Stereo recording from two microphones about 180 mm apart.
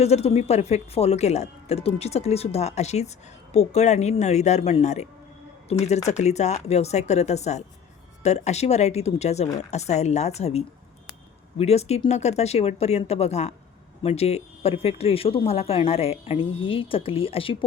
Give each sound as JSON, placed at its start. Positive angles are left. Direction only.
{"t": 0.0, "sound": "speech", "side_deg": 35}